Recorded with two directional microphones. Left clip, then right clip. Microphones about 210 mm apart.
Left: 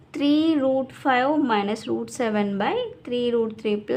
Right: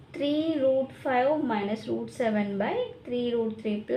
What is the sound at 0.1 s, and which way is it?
A woman's voice, 30° left (ahead or behind).